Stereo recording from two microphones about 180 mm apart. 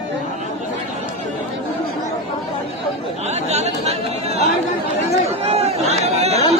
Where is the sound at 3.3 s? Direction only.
40° right (ahead or behind).